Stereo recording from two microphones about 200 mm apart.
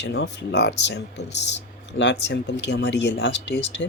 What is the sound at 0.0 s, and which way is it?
Speech, 60° left (ahead or behind).